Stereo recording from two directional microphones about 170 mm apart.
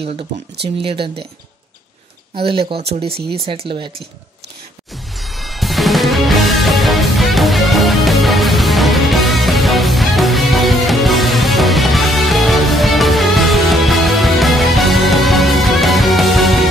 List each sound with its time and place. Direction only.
0.0 s speech: 45° right (ahead or behind)
0.8 s speech: 30° right (ahead or behind)
2.3 s speech: 35° right (ahead or behind)
4.9 s music: centre (ahead or behind)